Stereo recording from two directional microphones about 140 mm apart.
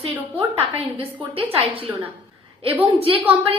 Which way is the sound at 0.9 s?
40° right (ahead or behind).